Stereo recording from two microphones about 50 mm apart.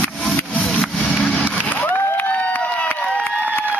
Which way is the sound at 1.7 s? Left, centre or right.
Left.